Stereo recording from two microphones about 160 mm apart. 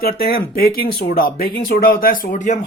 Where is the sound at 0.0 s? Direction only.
70° left (ahead or behind).